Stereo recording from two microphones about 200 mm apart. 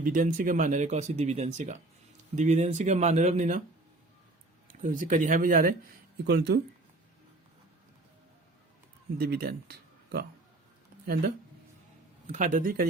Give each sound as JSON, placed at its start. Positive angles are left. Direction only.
{"t": 0.0, "sound": "speech", "side_deg": -40}
{"t": 4.7, "sound": "speech", "side_deg": -40}
{"t": 9.1, "sound": "speech", "side_deg": -50}
{"t": 12.3, "sound": "speech", "side_deg": -40}